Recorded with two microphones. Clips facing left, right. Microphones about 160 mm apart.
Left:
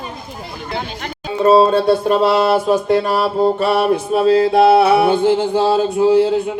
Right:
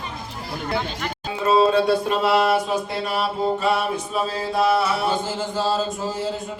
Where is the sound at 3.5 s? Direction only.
65° left (ahead or behind).